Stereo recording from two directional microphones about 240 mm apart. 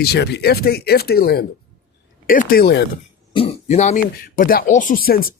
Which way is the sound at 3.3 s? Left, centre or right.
Left.